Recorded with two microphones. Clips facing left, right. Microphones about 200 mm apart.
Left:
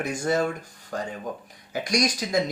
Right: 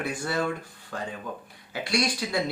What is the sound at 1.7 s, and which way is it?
Speech, 40° left (ahead or behind).